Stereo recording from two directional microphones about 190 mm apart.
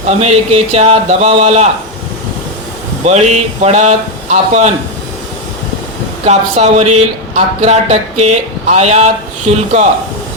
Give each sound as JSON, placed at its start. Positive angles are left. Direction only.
{"t": 0.2, "sound": "speech", "side_deg": -35}
{"t": 3.1, "sound": "speech", "side_deg": -35}
{"t": 6.2, "sound": "speech", "side_deg": -35}